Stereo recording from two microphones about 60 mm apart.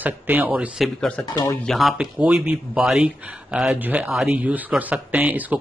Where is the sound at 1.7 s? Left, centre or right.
Centre.